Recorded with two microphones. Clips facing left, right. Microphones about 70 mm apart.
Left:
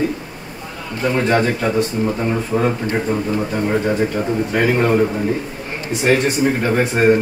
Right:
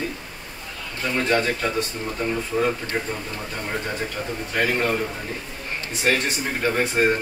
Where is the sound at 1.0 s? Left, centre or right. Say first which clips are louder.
Left 6 dB; left.